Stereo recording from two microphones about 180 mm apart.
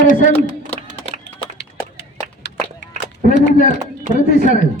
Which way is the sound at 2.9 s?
40° right (ahead or behind).